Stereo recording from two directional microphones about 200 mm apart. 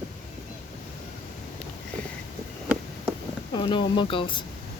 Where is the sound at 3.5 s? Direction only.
25° left (ahead or behind).